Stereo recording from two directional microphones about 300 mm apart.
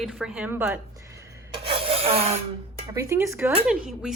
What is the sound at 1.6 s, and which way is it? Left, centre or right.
Rub, centre.